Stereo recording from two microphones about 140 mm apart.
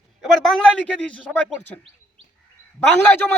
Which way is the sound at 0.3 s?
Centre (ahead or behind).